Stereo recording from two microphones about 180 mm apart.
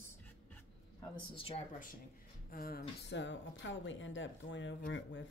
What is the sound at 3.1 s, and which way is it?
Speech, 80° left.